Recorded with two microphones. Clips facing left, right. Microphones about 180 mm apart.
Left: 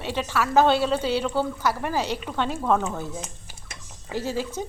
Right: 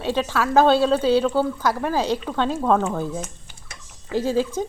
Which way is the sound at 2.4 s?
15° left (ahead or behind).